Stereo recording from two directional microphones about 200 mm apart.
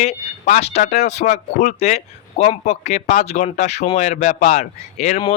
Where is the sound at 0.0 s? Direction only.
35° left (ahead or behind).